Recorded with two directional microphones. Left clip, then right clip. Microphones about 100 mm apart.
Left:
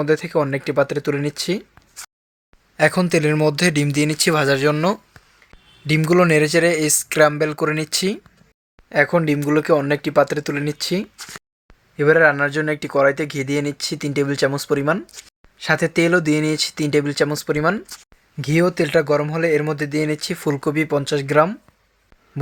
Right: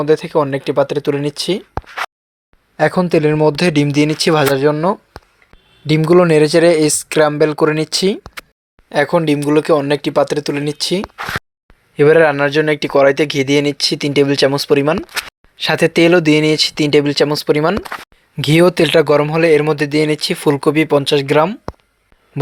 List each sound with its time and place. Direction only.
0.0 s speech: 15° right (ahead or behind)
2.7 s speech: 40° right (ahead or behind)
4.7 s speech: 15° right (ahead or behind)
5.8 s speech: 45° right (ahead or behind)
11.9 s speech: 50° right (ahead or behind); by 14.9 s 35° right (ahead or behind)
15.5 s speech: 55° right (ahead or behind); by 17.7 s 35° right (ahead or behind)
18.3 s speech: 50° right (ahead or behind)